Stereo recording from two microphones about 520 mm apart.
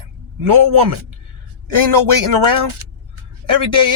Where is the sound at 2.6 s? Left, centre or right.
Right.